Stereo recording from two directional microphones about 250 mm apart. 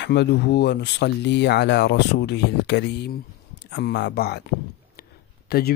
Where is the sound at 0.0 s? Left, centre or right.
Left.